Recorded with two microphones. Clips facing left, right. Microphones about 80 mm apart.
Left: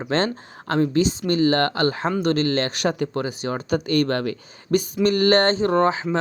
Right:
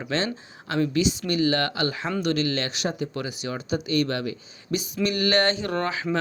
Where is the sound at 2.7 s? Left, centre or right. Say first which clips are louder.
Left 5 dB; left.